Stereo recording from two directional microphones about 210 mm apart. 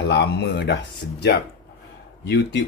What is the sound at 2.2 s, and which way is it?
Speech, 55° left (ahead or behind).